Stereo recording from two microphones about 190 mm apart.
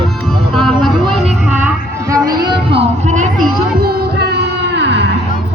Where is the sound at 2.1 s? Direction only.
20° right (ahead or behind); by 5.1 s 65° right (ahead or behind).